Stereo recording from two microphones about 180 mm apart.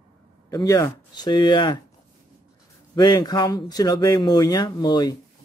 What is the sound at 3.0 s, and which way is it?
Speech, 20° left (ahead or behind).